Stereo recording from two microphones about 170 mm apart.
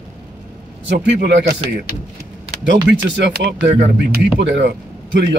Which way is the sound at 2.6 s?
90° right.